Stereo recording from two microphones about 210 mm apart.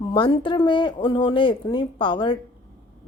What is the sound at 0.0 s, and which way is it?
Speech, 20° left (ahead or behind).